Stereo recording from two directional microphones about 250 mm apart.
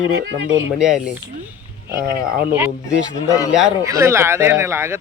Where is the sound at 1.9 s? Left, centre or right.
Right.